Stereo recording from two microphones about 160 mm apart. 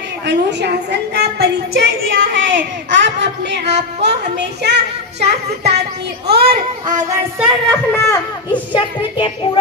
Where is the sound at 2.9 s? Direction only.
90° right.